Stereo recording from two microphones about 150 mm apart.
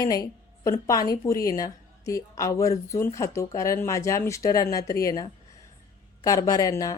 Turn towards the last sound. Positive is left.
turn(degrees=20)  # may be behind; listen again after turning